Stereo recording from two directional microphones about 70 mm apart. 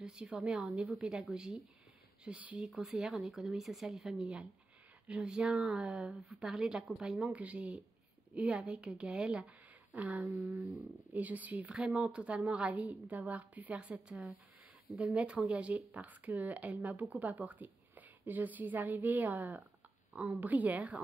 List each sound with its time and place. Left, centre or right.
0.0 s a woman's voice: centre
2.2 s speech: centre
2.6 s speech: centre
4.1 s a woman's voice: centre
7.2 s a woman's voice: right